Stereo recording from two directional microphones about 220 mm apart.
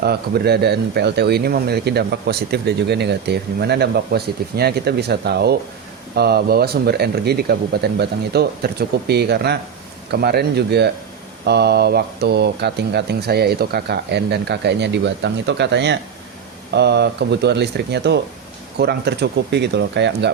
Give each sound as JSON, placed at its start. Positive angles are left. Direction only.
{"t": 0.0, "sound": "speech", "side_deg": -45}